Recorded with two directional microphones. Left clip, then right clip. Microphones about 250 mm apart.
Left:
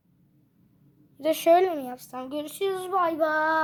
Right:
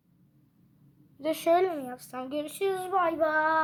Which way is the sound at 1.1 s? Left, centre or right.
Left.